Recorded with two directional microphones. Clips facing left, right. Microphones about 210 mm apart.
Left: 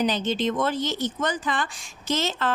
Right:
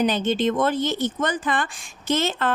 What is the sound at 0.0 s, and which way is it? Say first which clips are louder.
Speech: right 3 dB; 55° right (ahead or behind).